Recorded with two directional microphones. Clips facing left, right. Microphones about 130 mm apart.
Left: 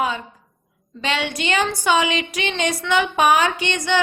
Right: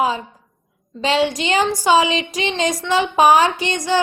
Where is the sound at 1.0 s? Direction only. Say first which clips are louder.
Right 6 dB; 35° right (ahead or behind).